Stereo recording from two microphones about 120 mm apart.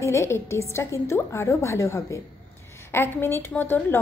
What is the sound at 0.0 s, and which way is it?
A woman's voice, 25° left (ahead or behind).